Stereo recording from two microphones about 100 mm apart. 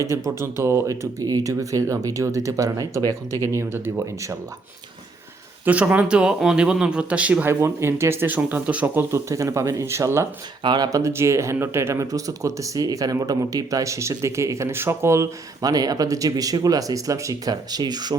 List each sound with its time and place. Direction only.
0.1 s speech: 25° right (ahead or behind)
3.5 s speech: 25° right (ahead or behind)
5.6 s speech: 15° right (ahead or behind)
7.6 s speech: 25° right (ahead or behind)
9.1 s speech: 30° right (ahead or behind)
10.6 s speech: 50° right (ahead or behind)
10.8 s speech: 30° right (ahead or behind)
15.6 s speech: 40° right (ahead or behind)